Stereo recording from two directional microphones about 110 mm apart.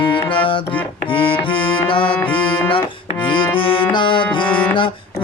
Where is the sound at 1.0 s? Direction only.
50° left (ahead or behind).